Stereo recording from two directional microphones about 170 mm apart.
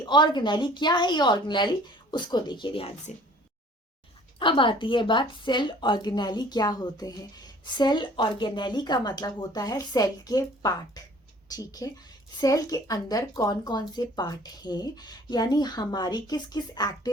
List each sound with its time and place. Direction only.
0.0 s a woman's voice: 25° left (ahead or behind)
4.4 s a woman's voice: 30° left (ahead or behind)